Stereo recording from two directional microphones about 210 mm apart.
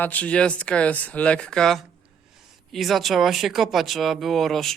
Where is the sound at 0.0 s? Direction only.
5° left (ahead or behind).